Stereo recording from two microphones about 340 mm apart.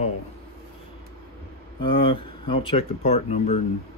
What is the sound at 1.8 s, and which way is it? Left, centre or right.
Mantra, centre.